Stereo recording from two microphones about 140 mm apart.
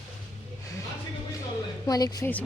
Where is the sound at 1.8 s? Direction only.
25° left (ahead or behind).